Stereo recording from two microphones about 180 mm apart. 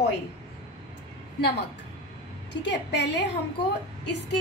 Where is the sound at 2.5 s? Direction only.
75° left (ahead or behind).